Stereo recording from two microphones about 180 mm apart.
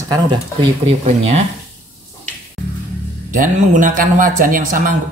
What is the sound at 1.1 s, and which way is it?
Speech, 35° right (ahead or behind).